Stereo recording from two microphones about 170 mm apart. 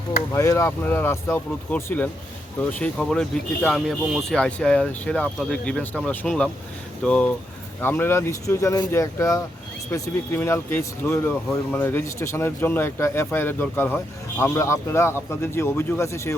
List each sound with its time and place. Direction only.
0.3 s speech: 20° left (ahead or behind)